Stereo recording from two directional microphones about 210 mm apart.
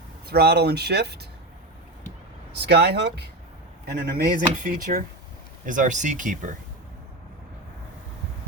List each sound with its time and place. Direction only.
0.3 s speech: 50° right (ahead or behind)
2.6 s speech: 50° right (ahead or behind)
4.1 s speech: 40° right (ahead or behind)